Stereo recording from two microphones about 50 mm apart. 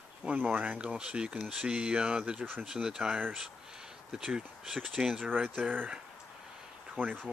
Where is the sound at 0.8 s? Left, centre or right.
Right.